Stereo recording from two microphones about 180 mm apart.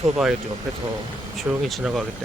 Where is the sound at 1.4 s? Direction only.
Centre (ahead or behind).